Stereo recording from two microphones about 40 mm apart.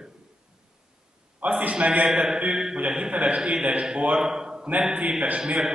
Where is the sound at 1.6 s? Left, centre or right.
Right.